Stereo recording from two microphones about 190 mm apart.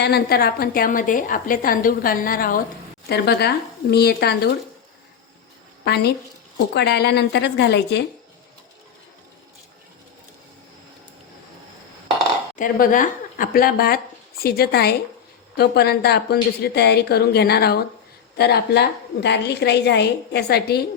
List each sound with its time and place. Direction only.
0.0 s a woman's voice: 55° left (ahead or behind)
3.1 s a woman's voice: 60° left (ahead or behind)
5.8 s a woman's voice: 60° left (ahead or behind)
12.5 s a woman's voice: 45° left (ahead or behind)